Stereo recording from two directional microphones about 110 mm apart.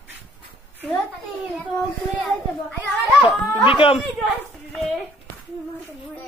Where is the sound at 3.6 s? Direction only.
50° left (ahead or behind).